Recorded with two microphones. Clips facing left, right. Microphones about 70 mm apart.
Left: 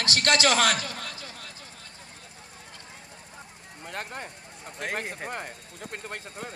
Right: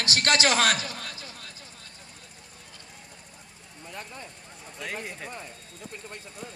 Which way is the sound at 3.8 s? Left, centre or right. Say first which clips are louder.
Left 5 dB; left.